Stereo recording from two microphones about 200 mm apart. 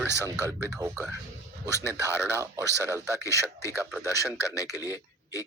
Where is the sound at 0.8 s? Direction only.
10° right (ahead or behind).